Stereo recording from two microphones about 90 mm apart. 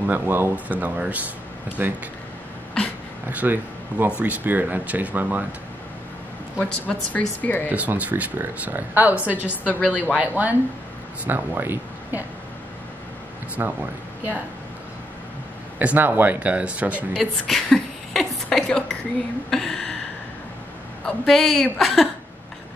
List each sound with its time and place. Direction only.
0.0 s speech: 20° right (ahead or behind)
3.3 s speech: 20° right (ahead or behind)
6.6 s speech: 15° left (ahead or behind)
7.7 s speech: 15° right (ahead or behind)
9.7 s a woman's voice: 15° left (ahead or behind)
10.1 s speech: 20° right (ahead or behind)
13.6 s speech: 30° right (ahead or behind)
15.8 s speech: 20° right (ahead or behind)
17.2 s a sound: 5° left (ahead or behind)
18.7 s speech: 10° left (ahead or behind)
19.5 s a sound: 5° left (ahead or behind)
21.0 s a woman's voice: centre (ahead or behind)